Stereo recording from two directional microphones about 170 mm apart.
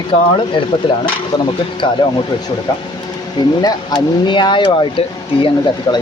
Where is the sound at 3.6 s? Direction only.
25° left (ahead or behind).